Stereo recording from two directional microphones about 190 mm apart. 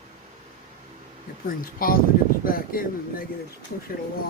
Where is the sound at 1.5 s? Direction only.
50° left (ahead or behind).